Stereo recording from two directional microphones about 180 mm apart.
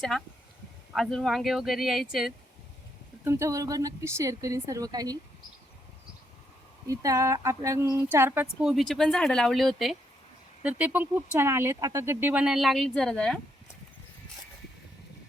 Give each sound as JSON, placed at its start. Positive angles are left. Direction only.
{"t": 0.1, "sound": "speech", "side_deg": 5}
{"t": 3.2, "sound": "speech", "side_deg": -15}
{"t": 6.8, "sound": "speech", "side_deg": -20}
{"t": 8.7, "sound": "speech", "side_deg": 0}